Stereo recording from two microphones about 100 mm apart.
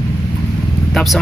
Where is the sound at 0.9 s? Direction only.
Centre (ahead or behind).